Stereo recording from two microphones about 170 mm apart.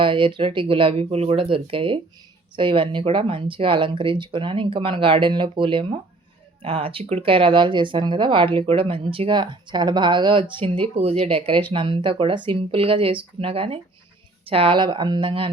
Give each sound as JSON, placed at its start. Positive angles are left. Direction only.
{"t": 0.0, "sound": "speech", "side_deg": -30}